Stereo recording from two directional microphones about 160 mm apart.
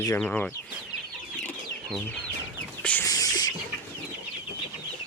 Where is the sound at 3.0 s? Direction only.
25° left (ahead or behind).